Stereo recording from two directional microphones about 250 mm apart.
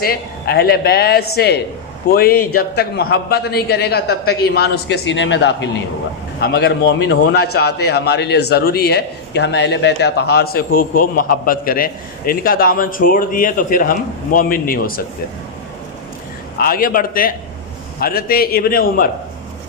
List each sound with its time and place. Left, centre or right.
0.0 s a man's voice: left
16.6 s a man's voice: left